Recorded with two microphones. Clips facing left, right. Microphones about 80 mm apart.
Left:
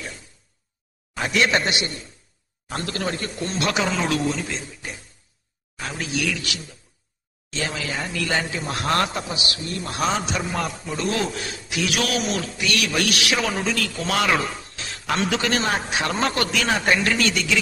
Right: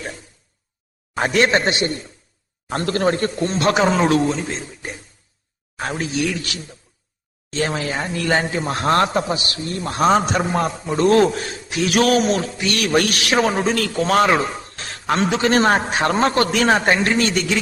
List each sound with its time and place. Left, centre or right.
1.1 s a man's voice: right
14.5 s a man's voice: right